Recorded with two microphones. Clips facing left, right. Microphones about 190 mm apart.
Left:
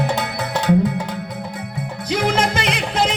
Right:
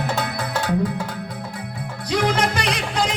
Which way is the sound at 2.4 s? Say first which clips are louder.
Left 2 dB; 25° left (ahead or behind).